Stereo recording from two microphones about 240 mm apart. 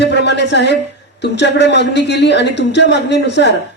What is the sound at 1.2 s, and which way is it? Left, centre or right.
A woman's voice, left.